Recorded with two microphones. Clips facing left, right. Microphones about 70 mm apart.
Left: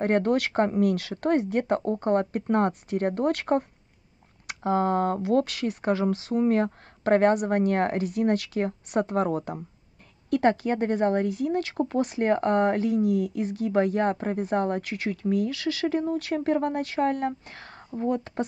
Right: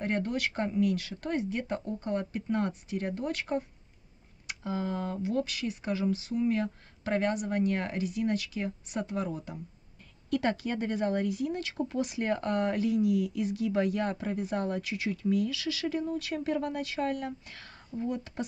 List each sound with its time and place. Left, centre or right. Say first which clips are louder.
0.0 s speech: left 8 dB; left